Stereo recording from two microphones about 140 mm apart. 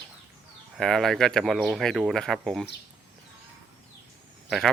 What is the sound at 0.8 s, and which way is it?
Cricket, 5° left (ahead or behind).